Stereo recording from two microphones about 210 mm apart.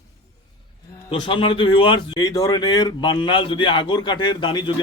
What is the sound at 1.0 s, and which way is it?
Speech, 25° left (ahead or behind).